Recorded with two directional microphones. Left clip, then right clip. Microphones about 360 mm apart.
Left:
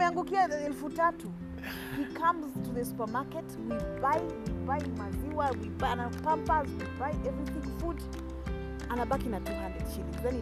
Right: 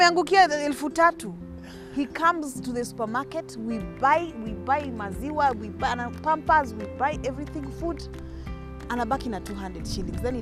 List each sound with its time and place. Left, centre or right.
0.0 s speech: right
2.1 s speech: right
5.4 s speech: right
8.9 s speech: right